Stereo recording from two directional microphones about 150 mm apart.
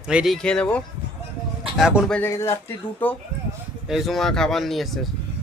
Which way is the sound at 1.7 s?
5° right (ahead or behind).